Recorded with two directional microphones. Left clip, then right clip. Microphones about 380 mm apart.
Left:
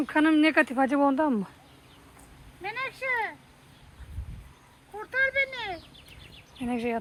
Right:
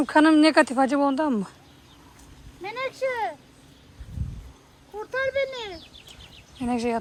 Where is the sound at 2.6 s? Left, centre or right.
Centre.